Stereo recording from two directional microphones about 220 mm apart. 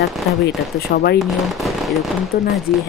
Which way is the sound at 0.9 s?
50° left (ahead or behind).